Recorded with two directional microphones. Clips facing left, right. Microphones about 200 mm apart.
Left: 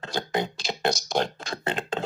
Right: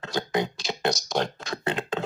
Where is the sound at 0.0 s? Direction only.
30° left (ahead or behind).